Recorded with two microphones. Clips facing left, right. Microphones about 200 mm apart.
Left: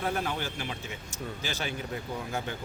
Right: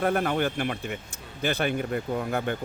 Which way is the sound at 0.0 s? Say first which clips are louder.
Right 7 dB; 55° right (ahead or behind).